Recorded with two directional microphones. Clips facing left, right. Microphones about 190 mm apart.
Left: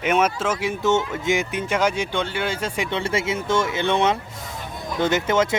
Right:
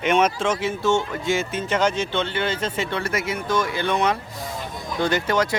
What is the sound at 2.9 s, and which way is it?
Speech, 25° left (ahead or behind).